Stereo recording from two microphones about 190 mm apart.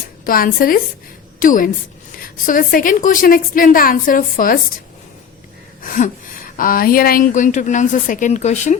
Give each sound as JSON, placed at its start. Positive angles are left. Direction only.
{"t": 0.3, "sound": "speech", "side_deg": 50}
{"t": 5.8, "sound": "speech", "side_deg": 45}